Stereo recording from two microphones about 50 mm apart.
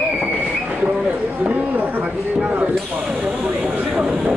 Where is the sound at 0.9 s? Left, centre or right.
Right.